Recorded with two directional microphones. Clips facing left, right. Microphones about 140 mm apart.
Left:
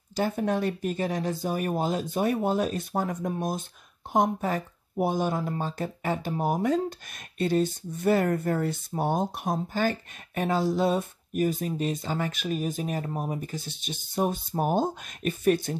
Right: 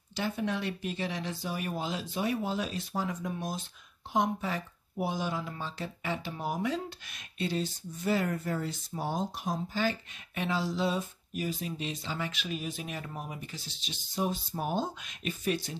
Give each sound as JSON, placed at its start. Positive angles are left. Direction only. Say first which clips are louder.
{"t": 0.1, "sound": "speech", "louder": "left 6 dB", "side_deg": 45}